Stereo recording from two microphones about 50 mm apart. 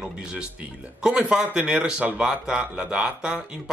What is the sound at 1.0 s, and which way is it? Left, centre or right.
Speech, centre.